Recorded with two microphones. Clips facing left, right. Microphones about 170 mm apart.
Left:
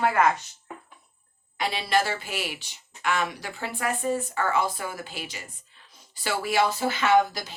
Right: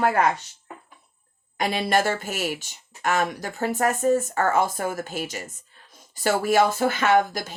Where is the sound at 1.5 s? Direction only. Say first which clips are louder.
Right 3 dB; 50° right (ahead or behind).